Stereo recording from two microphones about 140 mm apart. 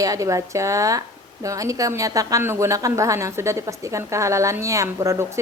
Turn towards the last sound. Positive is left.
turn(degrees=-20)  # may be behind; listen again after turning